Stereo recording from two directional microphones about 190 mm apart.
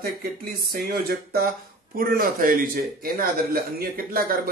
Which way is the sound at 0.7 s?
50° right (ahead or behind).